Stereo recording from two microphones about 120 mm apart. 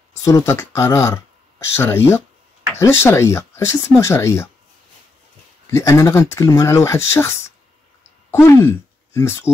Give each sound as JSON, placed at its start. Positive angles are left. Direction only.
{"t": 0.2, "sound": "speech", "side_deg": 25}
{"t": 5.7, "sound": "speech", "side_deg": 25}